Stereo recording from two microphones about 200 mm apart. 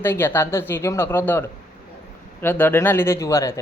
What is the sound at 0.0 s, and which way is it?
Speech, 10° left (ahead or behind).